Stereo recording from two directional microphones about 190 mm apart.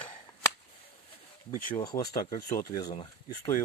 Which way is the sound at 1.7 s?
20° left (ahead or behind).